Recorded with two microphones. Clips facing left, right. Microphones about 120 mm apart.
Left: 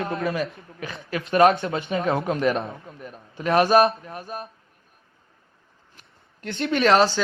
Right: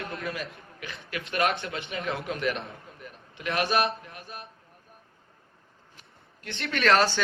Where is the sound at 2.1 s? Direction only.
30° left (ahead or behind).